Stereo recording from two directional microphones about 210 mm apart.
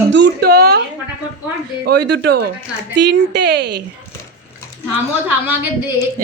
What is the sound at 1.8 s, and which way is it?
A woman's voice, 50° right (ahead or behind).